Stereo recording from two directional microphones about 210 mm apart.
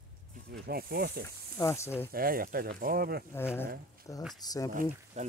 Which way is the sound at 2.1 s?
45° right (ahead or behind).